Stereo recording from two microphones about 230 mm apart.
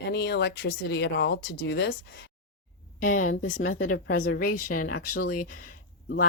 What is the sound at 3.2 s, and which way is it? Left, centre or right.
Speech, left.